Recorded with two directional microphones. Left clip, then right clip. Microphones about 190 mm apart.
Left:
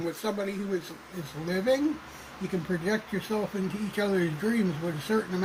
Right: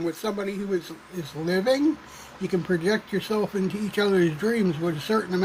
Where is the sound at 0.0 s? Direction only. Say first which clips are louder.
Right 3 dB; 50° right (ahead or behind).